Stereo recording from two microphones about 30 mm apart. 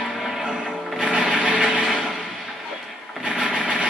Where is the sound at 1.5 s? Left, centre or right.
Right.